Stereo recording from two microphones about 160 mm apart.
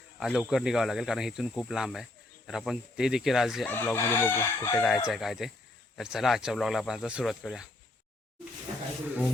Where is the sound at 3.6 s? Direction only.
15° left (ahead or behind).